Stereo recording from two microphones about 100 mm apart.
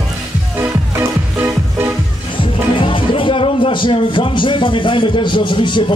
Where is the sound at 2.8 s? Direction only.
60° left (ahead or behind).